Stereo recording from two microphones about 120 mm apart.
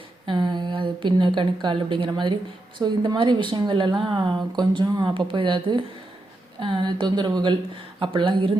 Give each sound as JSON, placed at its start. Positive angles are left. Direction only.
{"t": 0.3, "sound": "a woman's voice", "side_deg": -40}